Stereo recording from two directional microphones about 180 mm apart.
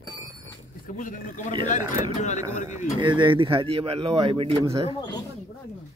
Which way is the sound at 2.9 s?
25° right (ahead or behind).